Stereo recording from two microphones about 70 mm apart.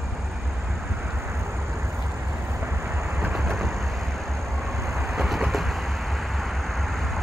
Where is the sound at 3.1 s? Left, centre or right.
Centre.